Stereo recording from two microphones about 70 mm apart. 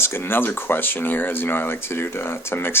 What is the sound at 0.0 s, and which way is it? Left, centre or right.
Speech, left.